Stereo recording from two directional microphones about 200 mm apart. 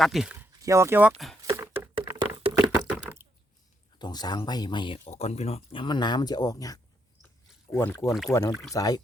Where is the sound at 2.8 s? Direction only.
10° right (ahead or behind).